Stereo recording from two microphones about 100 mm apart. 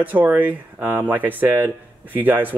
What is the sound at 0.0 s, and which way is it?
Speech, 15° right (ahead or behind).